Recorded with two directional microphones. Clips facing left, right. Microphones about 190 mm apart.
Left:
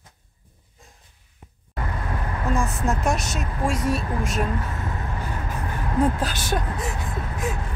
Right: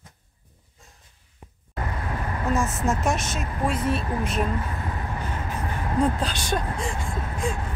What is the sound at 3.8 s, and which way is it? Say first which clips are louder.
Speech: left 1 dB; 45° left (ahead or behind).